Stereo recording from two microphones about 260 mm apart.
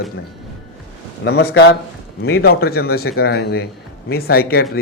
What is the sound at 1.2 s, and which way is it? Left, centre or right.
Speech, left.